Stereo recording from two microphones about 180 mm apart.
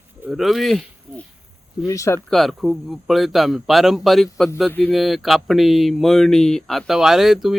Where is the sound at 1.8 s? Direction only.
15° left (ahead or behind).